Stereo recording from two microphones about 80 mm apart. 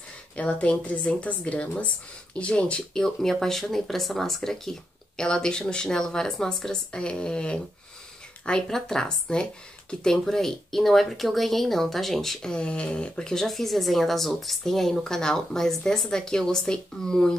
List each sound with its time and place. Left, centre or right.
0.4 s speech: centre